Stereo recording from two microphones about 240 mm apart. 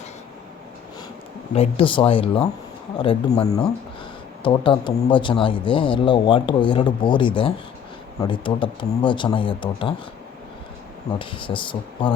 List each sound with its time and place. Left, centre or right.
1.5 s speech: left
11.2 s speech: left